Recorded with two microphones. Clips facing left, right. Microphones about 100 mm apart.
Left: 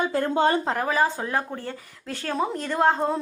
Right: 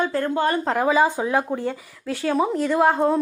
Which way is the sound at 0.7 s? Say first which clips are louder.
Right 5 dB; 15° right (ahead or behind).